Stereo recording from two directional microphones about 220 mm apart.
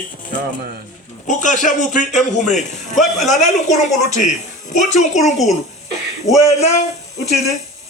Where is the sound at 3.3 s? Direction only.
35° left (ahead or behind).